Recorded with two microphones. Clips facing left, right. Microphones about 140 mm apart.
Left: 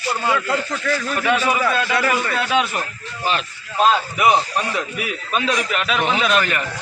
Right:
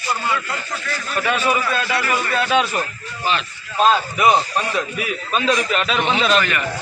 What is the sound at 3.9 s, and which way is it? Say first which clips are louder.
Speech: right 1 dB; 5° left (ahead or behind).